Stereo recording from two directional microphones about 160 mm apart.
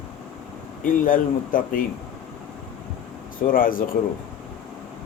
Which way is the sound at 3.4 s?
60° left (ahead or behind).